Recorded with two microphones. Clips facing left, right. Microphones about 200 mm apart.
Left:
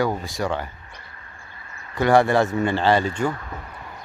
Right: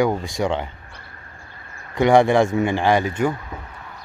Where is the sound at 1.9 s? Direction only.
15° right (ahead or behind).